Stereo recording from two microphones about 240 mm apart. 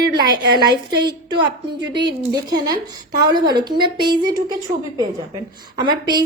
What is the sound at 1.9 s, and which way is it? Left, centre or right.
Speech, right.